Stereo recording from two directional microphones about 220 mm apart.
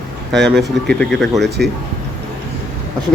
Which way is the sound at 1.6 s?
50° right (ahead or behind).